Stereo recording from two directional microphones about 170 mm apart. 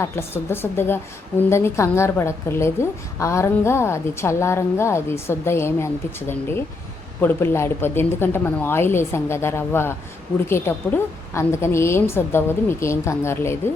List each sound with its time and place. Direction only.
0.0 s a woman's voice: 15° left (ahead or behind)